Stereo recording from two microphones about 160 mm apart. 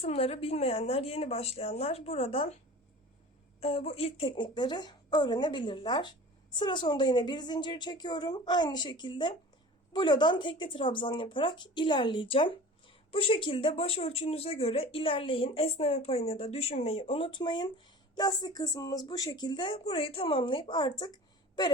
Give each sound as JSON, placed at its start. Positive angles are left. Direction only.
{"t": 0.0, "sound": "speech", "side_deg": 40}
{"t": 3.6, "sound": "a woman's voice", "side_deg": 35}